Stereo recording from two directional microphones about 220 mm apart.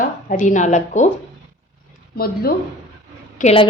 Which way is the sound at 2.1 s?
45° left (ahead or behind).